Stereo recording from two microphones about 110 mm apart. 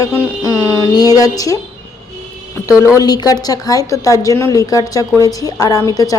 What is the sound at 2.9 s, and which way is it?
A woman's voice, 35° left (ahead or behind).